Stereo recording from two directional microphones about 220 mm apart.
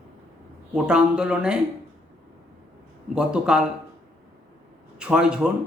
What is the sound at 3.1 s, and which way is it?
Speech, 5° right (ahead or behind).